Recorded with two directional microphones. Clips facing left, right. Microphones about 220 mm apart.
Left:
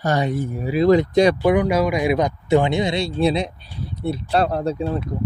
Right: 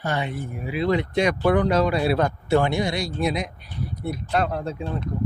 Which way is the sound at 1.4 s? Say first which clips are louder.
Left 2 dB; 10° left (ahead or behind).